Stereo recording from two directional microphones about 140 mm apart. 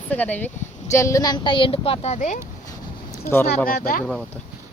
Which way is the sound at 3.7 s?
80° left.